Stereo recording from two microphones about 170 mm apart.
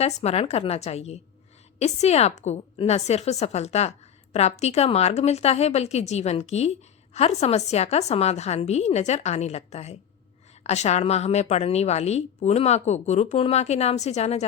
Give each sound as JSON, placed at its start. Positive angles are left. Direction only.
{"t": 0.0, "sound": "a woman's voice", "side_deg": 35}